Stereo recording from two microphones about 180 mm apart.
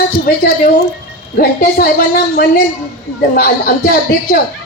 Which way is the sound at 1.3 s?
55° left (ahead or behind).